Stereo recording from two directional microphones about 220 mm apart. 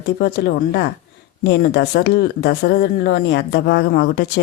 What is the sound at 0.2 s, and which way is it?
Speech, 45° left (ahead or behind).